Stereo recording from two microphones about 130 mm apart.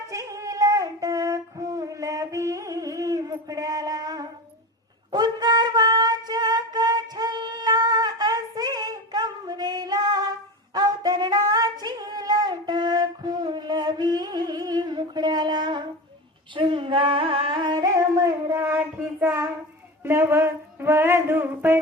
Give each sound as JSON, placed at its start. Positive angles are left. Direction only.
{"t": 0.1, "sound": "music", "side_deg": -25}
{"t": 10.8, "sound": "female singing", "side_deg": -30}
{"t": 16.6, "sound": "music", "side_deg": -40}
{"t": 20.1, "sound": "a sound", "side_deg": -20}